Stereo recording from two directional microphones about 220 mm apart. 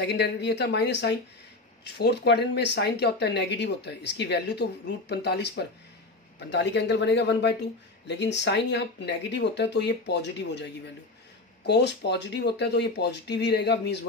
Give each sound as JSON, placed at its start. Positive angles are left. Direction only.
{"t": 0.0, "sound": "speech", "side_deg": 50}